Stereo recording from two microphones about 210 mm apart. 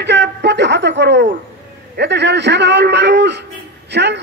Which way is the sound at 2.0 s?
55° right (ahead or behind).